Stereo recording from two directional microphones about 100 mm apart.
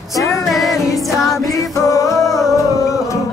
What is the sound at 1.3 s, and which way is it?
Music, 35° left (ahead or behind).